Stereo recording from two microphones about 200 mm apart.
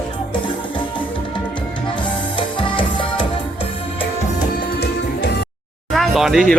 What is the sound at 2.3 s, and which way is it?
Music, 25° left (ahead or behind).